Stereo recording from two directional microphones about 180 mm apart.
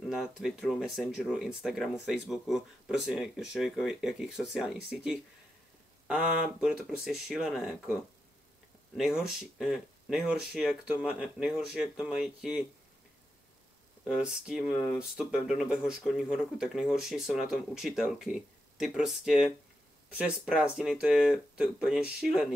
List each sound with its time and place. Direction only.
0.1 s speech: centre (ahead or behind)
8.9 s speech: 5° right (ahead or behind)
14.0 s speech: 5° right (ahead or behind)